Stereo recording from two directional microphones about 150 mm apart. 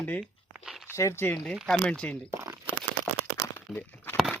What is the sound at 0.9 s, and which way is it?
Speech, 20° left (ahead or behind).